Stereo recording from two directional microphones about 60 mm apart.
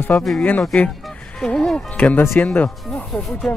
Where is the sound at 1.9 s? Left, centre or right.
Left.